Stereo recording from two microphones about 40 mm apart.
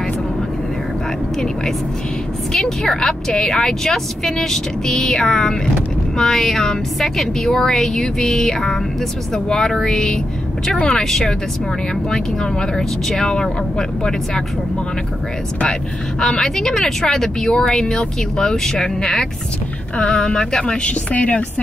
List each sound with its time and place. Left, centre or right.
2.5 s speech: centre
16.2 s speech: centre; by 21.5 s left